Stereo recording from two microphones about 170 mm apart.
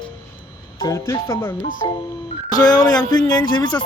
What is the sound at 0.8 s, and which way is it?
Speech, 15° left (ahead or behind).